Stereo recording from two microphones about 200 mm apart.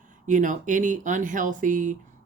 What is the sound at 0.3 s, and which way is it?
Speech, 40° right (ahead or behind).